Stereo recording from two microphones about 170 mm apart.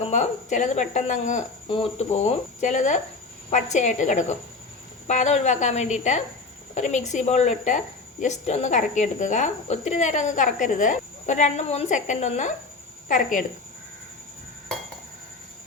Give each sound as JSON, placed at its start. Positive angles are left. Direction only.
{"t": 0.1, "sound": "speech", "side_deg": 45}
{"t": 1.6, "sound": "speech", "side_deg": 35}